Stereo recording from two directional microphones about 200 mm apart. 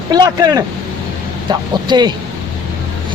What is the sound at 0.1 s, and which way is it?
Speech, 20° right (ahead or behind).